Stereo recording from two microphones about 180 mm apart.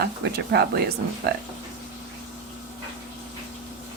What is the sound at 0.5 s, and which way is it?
Speech, 60° right (ahead or behind).